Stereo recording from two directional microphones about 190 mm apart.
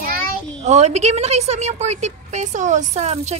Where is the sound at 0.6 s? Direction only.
35° right (ahead or behind).